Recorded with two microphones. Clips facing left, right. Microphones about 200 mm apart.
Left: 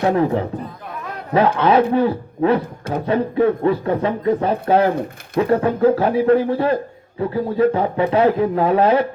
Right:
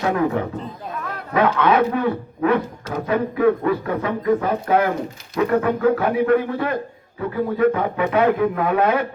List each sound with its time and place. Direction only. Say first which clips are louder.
0.0 s a man's voice: left 3 dB; 30° left (ahead or behind)